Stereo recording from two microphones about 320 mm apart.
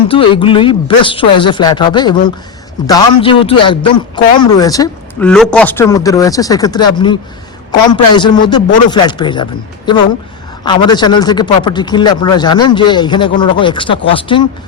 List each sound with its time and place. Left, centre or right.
0.1 s a man's voice: centre